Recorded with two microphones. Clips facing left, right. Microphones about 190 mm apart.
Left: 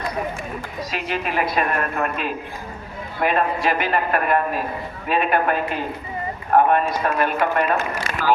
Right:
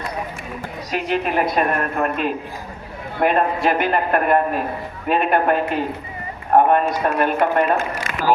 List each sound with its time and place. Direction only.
0.9 s a woman's voice: 50° right (ahead or behind)